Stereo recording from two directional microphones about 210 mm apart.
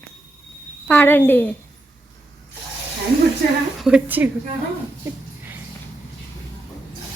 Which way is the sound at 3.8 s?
5° right (ahead or behind).